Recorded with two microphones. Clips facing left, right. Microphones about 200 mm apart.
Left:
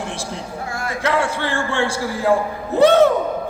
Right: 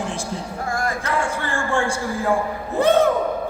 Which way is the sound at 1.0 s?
75° left (ahead or behind).